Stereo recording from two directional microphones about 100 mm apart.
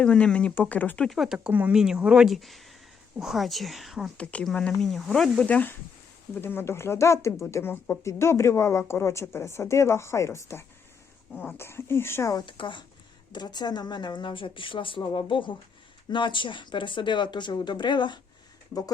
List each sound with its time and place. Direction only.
0.0 s speech: 10° left (ahead or behind)
1.5 s speech: 15° right (ahead or behind)
4.2 s speech: 15° left (ahead or behind)
4.7 s speech: centre (ahead or behind)
5.5 s a woman's voice: 15° left (ahead or behind)
12.3 s speech: 50° left (ahead or behind)